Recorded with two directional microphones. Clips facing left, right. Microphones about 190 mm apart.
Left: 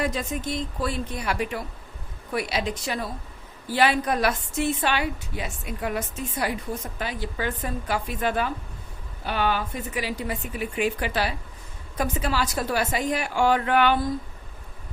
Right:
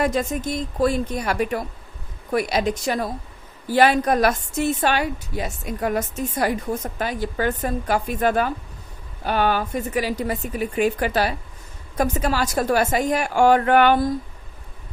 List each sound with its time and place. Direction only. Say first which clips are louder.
0.0 s a woman's voice: right 5 dB; 45° right (ahead or behind)